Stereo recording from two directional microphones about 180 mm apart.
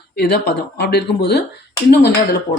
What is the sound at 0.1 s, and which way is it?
Speech, 60° left (ahead or behind).